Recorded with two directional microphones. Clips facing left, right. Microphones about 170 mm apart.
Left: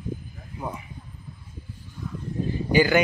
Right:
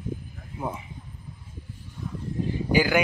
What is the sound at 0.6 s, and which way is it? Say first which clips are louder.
Speech: right 2 dB; 25° right (ahead or behind).